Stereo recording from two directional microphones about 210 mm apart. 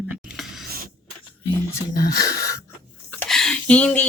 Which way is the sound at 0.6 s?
45° right (ahead or behind).